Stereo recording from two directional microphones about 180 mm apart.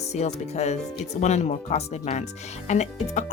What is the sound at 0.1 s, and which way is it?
Speech, 40° left (ahead or behind).